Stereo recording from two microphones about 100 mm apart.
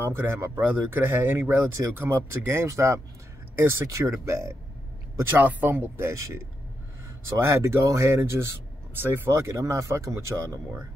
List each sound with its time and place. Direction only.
0.0 s speech: 25° right (ahead or behind)
5.4 s speech: 15° right (ahead or behind)